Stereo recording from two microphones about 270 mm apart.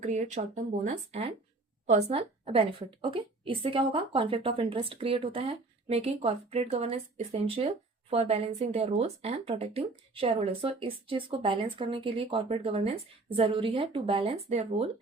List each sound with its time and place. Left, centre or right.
0.0 s speech: right